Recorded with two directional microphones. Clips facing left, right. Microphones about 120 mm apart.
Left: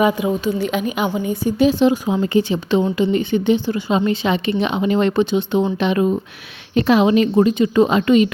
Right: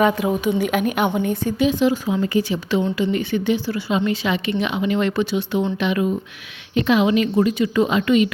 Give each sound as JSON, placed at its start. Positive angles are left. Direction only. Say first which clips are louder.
{"t": 0.0, "sound": "a woman's voice", "louder": "left 1 dB", "side_deg": 0}
{"t": 1.5, "sound": "speech", "louder": "left 4 dB", "side_deg": 35}
{"t": 3.8, "sound": "speech", "louder": "left 2 dB", "side_deg": 35}
{"t": 5.6, "sound": "speech", "louder": "left 3 dB", "side_deg": 30}